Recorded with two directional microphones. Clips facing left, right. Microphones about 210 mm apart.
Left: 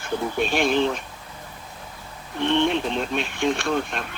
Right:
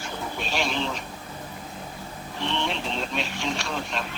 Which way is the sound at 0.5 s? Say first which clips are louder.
Left 6 dB; 55° left (ahead or behind).